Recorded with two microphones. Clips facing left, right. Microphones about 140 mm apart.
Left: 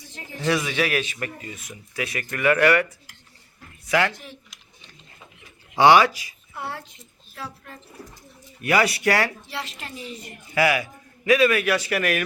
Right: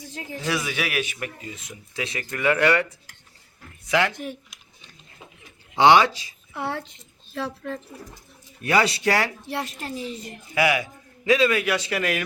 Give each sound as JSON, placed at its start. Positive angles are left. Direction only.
{"t": 0.3, "sound": "speech", "side_deg": -5}
{"t": 3.8, "sound": "speech", "side_deg": -20}
{"t": 4.1, "sound": "a woman's voice", "side_deg": -50}
{"t": 5.7, "sound": "speech", "side_deg": -20}
{"t": 7.3, "sound": "speech", "side_deg": -90}
{"t": 8.6, "sound": "speech", "side_deg": -25}
{"t": 9.5, "sound": "a woman's voice", "side_deg": -50}
{"t": 9.8, "sound": "a woman's voice", "side_deg": -35}
{"t": 10.5, "sound": "speech", "side_deg": -20}